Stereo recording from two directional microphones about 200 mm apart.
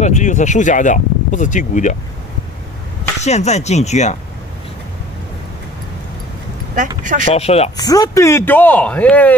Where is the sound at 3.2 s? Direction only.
35° left (ahead or behind).